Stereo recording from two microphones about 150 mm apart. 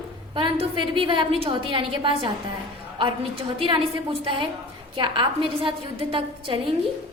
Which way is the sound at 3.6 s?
35° right (ahead or behind).